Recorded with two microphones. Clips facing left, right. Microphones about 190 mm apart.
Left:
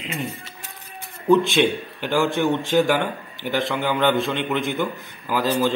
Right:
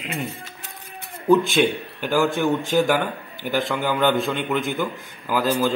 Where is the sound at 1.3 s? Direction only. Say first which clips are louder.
Even; centre (ahead or behind).